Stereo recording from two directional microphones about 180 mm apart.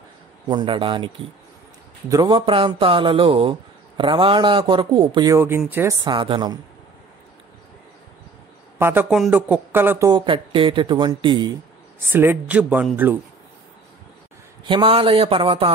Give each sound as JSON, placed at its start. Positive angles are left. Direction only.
{"t": 0.5, "sound": "speech", "side_deg": -25}
{"t": 8.7, "sound": "speech", "side_deg": -15}
{"t": 12.1, "sound": "speech", "side_deg": -10}
{"t": 14.6, "sound": "speech", "side_deg": -25}